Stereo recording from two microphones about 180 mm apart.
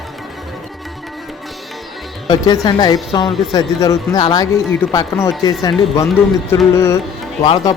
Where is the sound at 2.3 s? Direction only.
20° left (ahead or behind).